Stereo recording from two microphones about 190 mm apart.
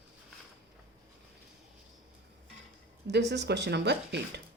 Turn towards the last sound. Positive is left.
turn(degrees=-65)  # may be behind; listen again after turning